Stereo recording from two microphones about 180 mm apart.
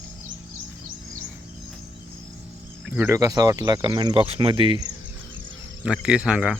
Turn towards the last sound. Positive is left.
turn(degrees=-5)  # may be behind; listen again after turning